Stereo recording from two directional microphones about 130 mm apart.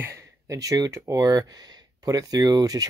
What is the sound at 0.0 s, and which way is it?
Speech, 25° right (ahead or behind).